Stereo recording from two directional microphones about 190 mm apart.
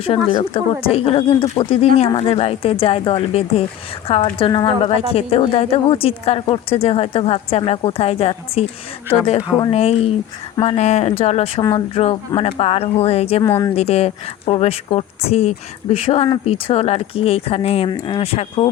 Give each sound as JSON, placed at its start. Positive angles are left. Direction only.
{"t": 0.3, "sound": "a woman's voice", "side_deg": 30}
{"t": 13.4, "sound": "speech", "side_deg": 15}
{"t": 13.7, "sound": "a woman's voice", "side_deg": 30}